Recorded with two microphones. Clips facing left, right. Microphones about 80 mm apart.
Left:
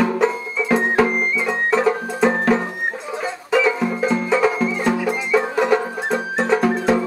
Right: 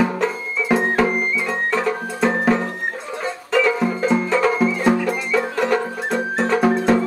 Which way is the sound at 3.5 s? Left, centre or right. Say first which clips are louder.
Even; centre.